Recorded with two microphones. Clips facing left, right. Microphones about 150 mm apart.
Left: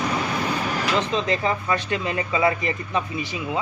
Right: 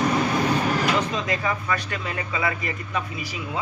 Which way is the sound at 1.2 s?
25° left (ahead or behind).